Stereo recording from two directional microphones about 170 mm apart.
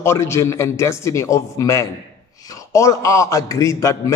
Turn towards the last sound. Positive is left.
turn(degrees=20)  # may be behind; listen again after turning